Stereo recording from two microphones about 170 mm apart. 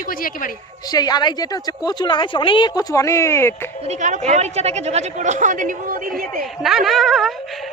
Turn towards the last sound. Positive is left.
turn(degrees=0)  # may be behind; listen again after turning